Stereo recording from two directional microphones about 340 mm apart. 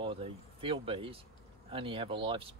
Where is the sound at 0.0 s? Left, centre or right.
Centre.